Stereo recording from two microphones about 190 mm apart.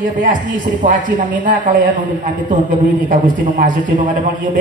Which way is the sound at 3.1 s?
45° right (ahead or behind).